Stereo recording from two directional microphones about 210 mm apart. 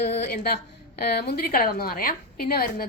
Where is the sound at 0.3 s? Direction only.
50° left (ahead or behind).